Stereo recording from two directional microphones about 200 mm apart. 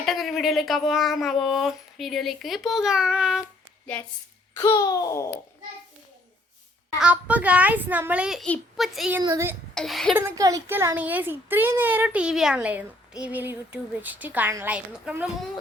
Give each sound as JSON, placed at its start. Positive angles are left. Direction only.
{"t": 0.0, "sound": "speech", "side_deg": 0}
{"t": 4.5, "sound": "babbling", "side_deg": 15}
{"t": 7.0, "sound": "speech", "side_deg": -5}
{"t": 9.2, "sound": "speech", "side_deg": -15}
{"t": 9.7, "sound": "speech", "side_deg": 0}
{"t": 10.2, "sound": "speech", "side_deg": -15}